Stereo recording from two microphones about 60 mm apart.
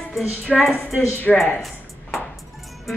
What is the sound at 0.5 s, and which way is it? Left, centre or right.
Speech, centre.